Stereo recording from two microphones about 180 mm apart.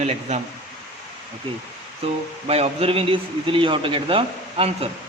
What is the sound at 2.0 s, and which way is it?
A man's voice, 35° right (ahead or behind).